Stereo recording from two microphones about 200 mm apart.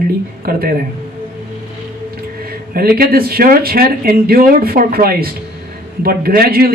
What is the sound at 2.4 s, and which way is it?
Speech, 50° right (ahead or behind).